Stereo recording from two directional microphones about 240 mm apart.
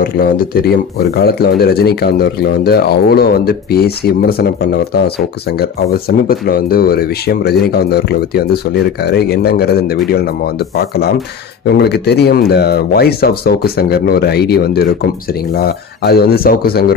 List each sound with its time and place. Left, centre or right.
0.0 s speech: left
5.6 s speech: left